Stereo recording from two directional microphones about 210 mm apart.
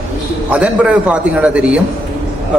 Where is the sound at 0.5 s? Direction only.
5° right (ahead or behind).